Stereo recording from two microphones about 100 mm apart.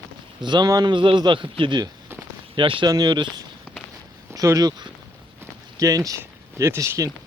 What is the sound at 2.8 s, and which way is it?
Speech, 45° right (ahead or behind).